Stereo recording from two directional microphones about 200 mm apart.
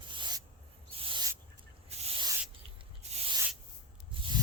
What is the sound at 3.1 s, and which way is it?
Rub, 30° right (ahead or behind).